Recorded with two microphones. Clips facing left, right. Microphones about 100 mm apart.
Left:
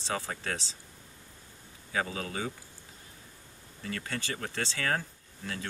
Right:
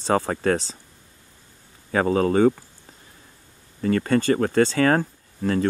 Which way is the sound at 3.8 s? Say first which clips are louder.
Right 17 dB; 50° right (ahead or behind).